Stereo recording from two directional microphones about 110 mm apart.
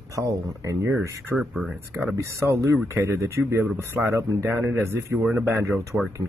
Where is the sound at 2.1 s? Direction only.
25° right (ahead or behind).